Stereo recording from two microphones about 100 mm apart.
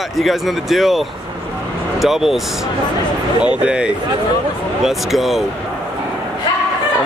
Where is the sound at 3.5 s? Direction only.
10° right (ahead or behind).